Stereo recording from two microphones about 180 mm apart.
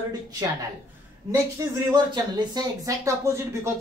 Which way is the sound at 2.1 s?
25° right (ahead or behind).